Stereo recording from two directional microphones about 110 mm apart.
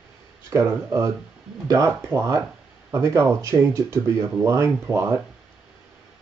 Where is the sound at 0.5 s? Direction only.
25° right (ahead or behind).